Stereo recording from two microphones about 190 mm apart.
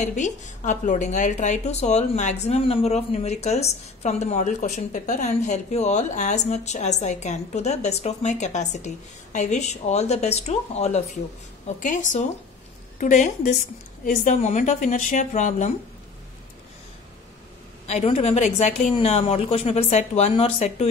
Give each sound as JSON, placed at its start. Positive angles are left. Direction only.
{"t": 0.0, "sound": "a woman's voice", "side_deg": 40}
{"t": 17.8, "sound": "a woman's voice", "side_deg": 35}